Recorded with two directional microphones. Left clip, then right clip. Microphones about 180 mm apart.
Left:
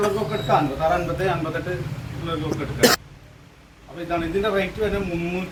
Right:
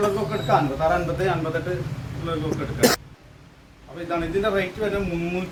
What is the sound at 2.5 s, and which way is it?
Speech, 10° right (ahead or behind).